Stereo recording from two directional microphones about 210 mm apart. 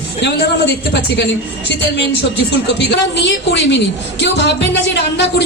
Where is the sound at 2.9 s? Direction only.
55° left (ahead or behind).